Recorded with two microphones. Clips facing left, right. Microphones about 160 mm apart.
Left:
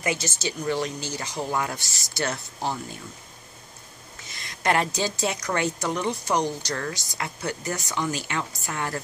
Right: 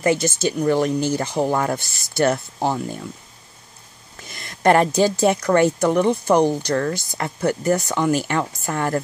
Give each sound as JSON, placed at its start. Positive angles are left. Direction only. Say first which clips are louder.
{"t": 0.0, "sound": "speech", "louder": "right 9 dB", "side_deg": -50}
{"t": 4.3, "sound": "speech", "louder": "right 8 dB", "side_deg": -55}